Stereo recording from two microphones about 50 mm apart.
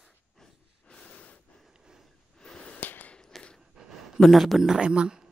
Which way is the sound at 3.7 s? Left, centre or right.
Centre.